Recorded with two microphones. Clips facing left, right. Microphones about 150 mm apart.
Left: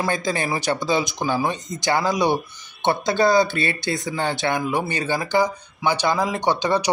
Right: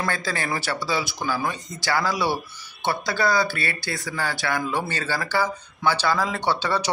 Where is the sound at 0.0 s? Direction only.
20° left (ahead or behind).